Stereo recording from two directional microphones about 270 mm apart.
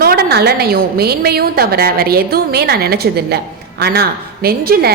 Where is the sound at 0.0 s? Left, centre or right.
Right.